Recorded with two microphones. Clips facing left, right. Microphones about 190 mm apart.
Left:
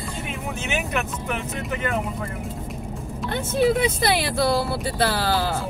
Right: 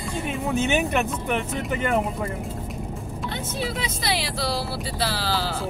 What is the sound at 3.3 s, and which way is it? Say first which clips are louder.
Speech: left 11 dB; 55° left (ahead or behind).